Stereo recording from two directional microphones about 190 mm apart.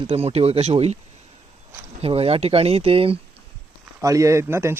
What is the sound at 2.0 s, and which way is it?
Speech, 30° right (ahead or behind).